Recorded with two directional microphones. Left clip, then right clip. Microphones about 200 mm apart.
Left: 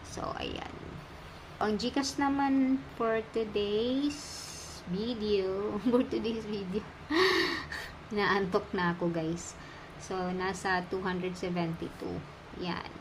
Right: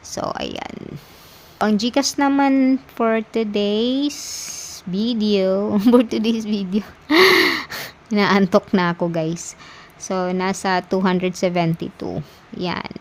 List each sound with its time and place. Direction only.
0.1 s a woman's voice: 55° right (ahead or behind)